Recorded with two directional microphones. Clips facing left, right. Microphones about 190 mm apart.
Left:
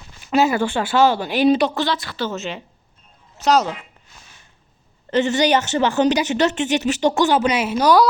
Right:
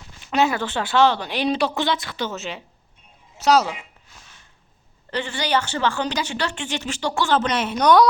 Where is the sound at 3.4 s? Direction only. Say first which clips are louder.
Left 1 dB; 10° right (ahead or behind).